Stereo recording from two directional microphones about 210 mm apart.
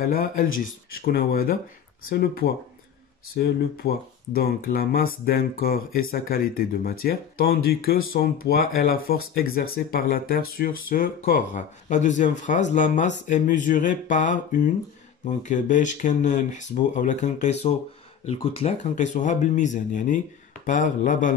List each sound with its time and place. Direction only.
0.0 s speech: 45° left (ahead or behind)